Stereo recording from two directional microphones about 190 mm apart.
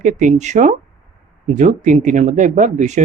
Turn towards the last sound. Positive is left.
turn(degrees=-40)  # may be behind; listen again after turning